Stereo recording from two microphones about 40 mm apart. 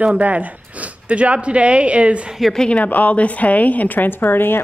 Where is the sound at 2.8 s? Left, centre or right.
Left.